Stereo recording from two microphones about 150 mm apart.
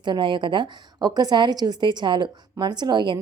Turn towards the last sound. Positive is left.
turn(degrees=-30)  # may be behind; listen again after turning